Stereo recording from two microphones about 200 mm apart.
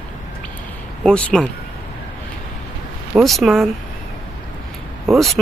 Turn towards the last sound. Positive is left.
turn(degrees=0)  # may be behind; listen again after turning